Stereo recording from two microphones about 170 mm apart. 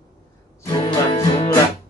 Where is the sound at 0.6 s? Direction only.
30° left (ahead or behind).